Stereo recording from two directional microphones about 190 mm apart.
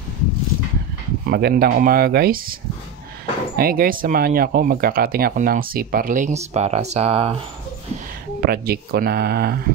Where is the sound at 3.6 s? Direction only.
50° right (ahead or behind); by 7.4 s 30° right (ahead or behind).